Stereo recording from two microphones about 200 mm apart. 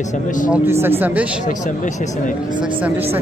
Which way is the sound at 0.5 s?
10° right (ahead or behind).